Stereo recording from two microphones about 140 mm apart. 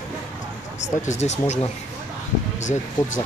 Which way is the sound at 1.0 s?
55° left (ahead or behind).